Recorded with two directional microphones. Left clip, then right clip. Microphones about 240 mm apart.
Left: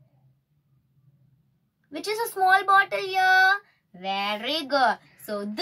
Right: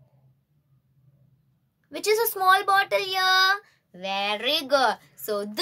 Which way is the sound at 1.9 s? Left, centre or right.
Right.